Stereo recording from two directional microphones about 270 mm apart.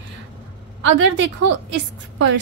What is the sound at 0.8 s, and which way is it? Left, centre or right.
Speech, right.